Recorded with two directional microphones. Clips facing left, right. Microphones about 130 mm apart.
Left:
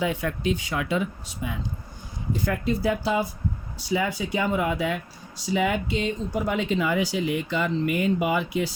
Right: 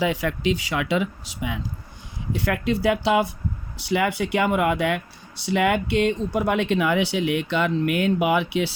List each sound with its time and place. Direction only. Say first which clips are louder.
0.0 s speech: right 3 dB; 90° right
2.3 s speech: right 2 dB; 75° right (ahead or behind)